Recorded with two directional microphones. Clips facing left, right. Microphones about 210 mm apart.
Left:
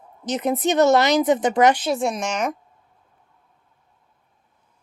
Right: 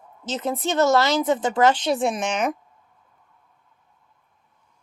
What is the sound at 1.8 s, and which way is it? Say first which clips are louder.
Speech: even; centre (ahead or behind).